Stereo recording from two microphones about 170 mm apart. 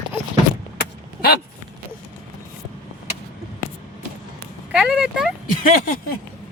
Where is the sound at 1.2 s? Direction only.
70° left (ahead or behind).